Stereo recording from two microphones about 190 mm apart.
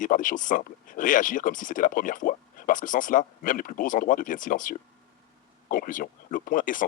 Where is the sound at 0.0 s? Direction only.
45° left (ahead or behind).